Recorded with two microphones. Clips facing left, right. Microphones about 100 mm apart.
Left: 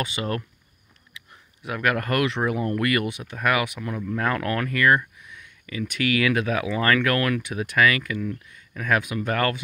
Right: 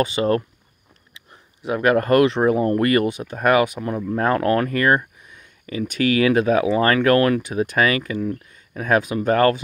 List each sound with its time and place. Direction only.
0.0 s speech: 35° right (ahead or behind)